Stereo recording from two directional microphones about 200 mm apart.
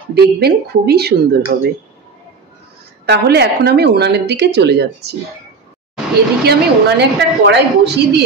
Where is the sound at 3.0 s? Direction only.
55° right (ahead or behind).